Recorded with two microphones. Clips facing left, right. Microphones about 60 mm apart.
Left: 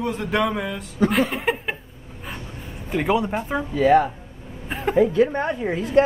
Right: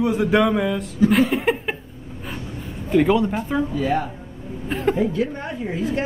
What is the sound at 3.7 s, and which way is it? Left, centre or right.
Speech, left.